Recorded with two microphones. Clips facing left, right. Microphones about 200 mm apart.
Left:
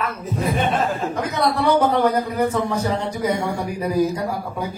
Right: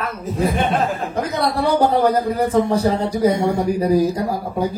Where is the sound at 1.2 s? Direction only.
35° right (ahead or behind).